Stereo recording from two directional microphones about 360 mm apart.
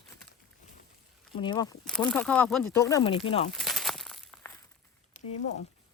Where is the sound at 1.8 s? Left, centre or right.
Centre.